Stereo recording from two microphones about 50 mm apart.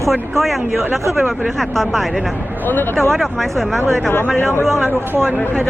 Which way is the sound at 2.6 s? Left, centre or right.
Left.